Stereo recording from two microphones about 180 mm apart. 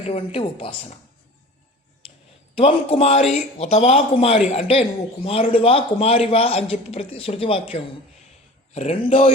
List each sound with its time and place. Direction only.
0.0 s a man's voice: 35° left (ahead or behind)
2.6 s a man's voice: 30° left (ahead or behind)